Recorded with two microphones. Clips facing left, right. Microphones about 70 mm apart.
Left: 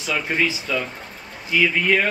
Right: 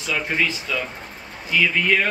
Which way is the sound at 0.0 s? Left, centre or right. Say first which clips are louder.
Left 1 dB; centre.